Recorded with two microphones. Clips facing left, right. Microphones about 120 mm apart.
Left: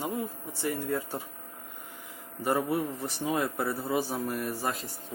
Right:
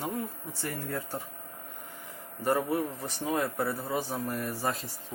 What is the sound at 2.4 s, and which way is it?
Speech, 10° left (ahead or behind).